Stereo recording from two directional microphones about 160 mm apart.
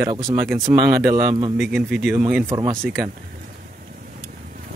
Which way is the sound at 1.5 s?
5° right (ahead or behind).